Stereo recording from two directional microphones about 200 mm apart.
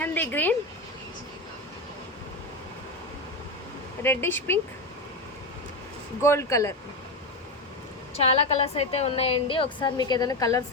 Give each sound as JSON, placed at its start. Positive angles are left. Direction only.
{"t": 0.0, "sound": "a sound", "side_deg": 10}
{"t": 4.0, "sound": "speech", "side_deg": 10}
{"t": 6.2, "sound": "speech", "side_deg": 15}
{"t": 8.1, "sound": "a woman's voice", "side_deg": 30}